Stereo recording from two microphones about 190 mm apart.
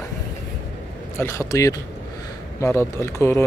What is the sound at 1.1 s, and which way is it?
Speech, 15° left (ahead or behind).